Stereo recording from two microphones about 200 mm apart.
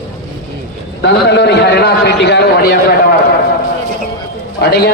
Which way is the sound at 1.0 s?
55° left (ahead or behind).